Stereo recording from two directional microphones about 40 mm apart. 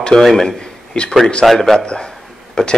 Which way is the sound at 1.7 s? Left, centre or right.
Left.